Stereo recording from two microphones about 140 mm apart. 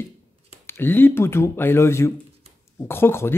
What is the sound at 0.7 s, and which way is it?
Speech, 15° left (ahead or behind).